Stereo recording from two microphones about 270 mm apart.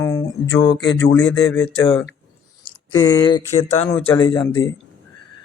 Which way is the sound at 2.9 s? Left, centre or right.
Centre.